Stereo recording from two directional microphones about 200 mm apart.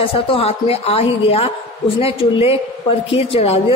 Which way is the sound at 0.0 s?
30° left (ahead or behind).